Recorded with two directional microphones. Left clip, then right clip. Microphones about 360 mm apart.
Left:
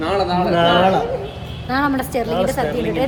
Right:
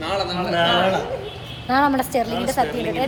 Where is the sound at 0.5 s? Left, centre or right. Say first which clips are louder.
Left 3 dB; centre.